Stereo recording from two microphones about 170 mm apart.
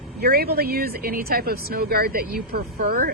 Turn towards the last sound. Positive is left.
turn(degrees=-55)  # may be behind; listen again after turning